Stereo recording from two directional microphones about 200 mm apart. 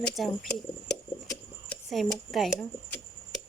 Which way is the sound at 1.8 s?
Centre (ahead or behind).